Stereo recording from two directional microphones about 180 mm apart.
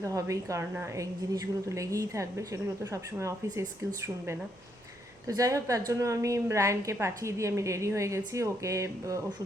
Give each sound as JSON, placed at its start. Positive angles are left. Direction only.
{"t": 0.0, "sound": "a woman's voice", "side_deg": -15}
{"t": 5.4, "sound": "a woman's voice", "side_deg": -20}